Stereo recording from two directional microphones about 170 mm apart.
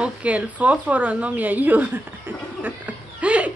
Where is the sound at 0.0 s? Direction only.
10° right (ahead or behind).